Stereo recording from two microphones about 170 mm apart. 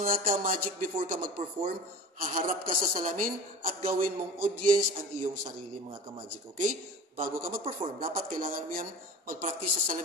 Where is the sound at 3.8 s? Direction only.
55° right (ahead or behind).